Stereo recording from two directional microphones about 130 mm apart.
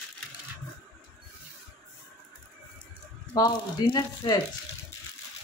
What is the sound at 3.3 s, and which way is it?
Speech, 35° left (ahead or behind).